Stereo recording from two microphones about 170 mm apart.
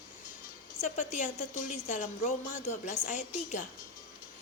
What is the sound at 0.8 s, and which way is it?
Speech, 45° left (ahead or behind).